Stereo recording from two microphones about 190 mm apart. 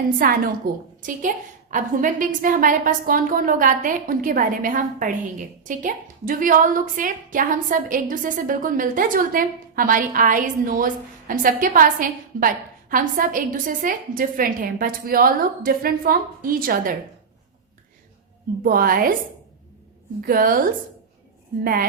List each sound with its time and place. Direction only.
0.2 s a woman's voice: 50° right (ahead or behind)
1.7 s a woman's voice: 45° right (ahead or behind)
18.6 s a woman's voice: 50° right (ahead or behind)
20.2 s a woman's voice: 50° right (ahead or behind)
21.6 s a woman's voice: 50° right (ahead or behind)